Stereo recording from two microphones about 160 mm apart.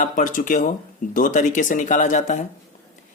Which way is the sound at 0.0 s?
55° left (ahead or behind).